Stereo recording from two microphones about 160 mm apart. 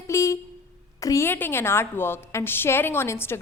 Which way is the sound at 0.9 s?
20° left (ahead or behind).